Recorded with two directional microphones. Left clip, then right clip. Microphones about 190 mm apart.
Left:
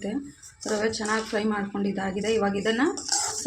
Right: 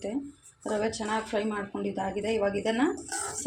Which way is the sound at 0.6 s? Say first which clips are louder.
Left 3 dB; 15° left (ahead or behind).